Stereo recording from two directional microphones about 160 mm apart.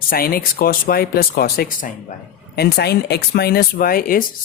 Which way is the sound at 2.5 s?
80° left.